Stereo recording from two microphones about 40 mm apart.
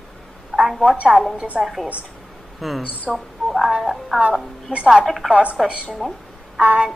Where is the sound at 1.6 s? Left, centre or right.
Centre.